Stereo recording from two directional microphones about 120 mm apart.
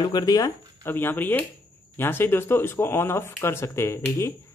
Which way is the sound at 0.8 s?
15° left (ahead or behind).